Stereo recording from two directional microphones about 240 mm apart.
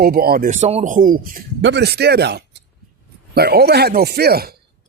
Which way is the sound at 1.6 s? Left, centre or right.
Right.